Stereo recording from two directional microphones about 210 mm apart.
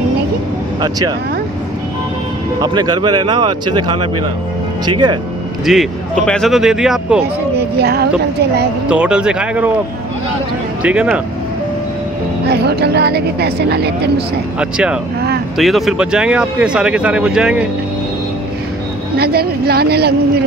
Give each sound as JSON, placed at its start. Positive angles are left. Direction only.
{"t": 0.7, "sound": "speech", "side_deg": -20}
{"t": 2.6, "sound": "speech", "side_deg": -20}
{"t": 5.7, "sound": "speech", "side_deg": 0}
{"t": 7.5, "sound": "speech", "side_deg": -50}
{"t": 8.8, "sound": "speech", "side_deg": -5}
{"t": 10.8, "sound": "speech", "side_deg": -5}
{"t": 12.4, "sound": "speech", "side_deg": -50}
{"t": 14.6, "sound": "speech", "side_deg": -5}
{"t": 19.1, "sound": "speech", "side_deg": -45}